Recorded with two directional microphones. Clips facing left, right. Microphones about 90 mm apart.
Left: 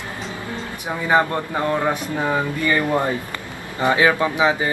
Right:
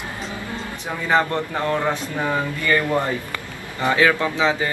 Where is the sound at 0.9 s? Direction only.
15° left (ahead or behind).